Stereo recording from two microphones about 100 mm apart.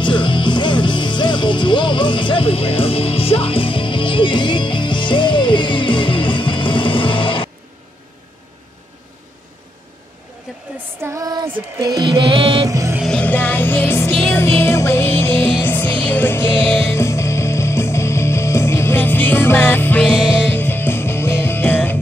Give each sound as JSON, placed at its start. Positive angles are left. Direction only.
{"t": 0.0, "sound": "music", "side_deg": 55}
{"t": 11.0, "sound": "female singing", "side_deg": -25}
{"t": 11.2, "sound": "child singing", "side_deg": -45}
{"t": 11.7, "sound": "music", "side_deg": -35}
{"t": 12.1, "sound": "music", "side_deg": -50}
{"t": 12.6, "sound": "music", "side_deg": -35}
{"t": 13.2, "sound": "music", "side_deg": 20}